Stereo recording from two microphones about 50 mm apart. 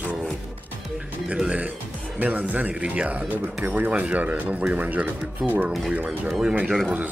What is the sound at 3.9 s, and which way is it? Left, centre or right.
Speech, right.